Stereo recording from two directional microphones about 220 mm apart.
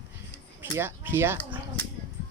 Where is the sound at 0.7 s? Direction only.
10° right (ahead or behind).